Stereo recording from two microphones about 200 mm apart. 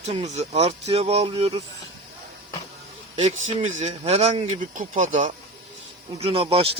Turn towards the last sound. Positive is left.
turn(degrees=-30)  # may be behind; listen again after turning